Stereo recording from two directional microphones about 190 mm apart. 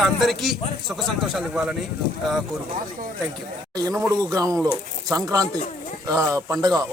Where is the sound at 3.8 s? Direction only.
15° right (ahead or behind).